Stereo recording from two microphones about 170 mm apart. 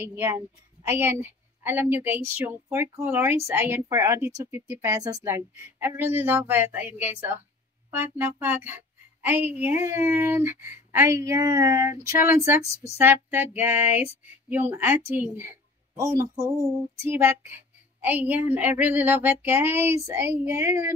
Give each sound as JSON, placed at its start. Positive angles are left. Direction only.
{"t": 0.1, "sound": "speech", "side_deg": -15}